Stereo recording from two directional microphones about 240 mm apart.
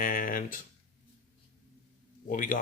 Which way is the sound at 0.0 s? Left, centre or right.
Left.